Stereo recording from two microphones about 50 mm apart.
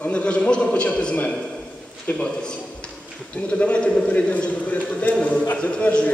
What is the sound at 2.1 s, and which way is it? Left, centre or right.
Speech, left.